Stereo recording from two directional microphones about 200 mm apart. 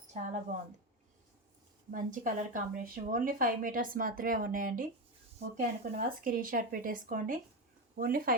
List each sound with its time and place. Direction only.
0.1 s a woman's voice: 35° right (ahead or behind)
1.9 s a woman's voice: 40° right (ahead or behind)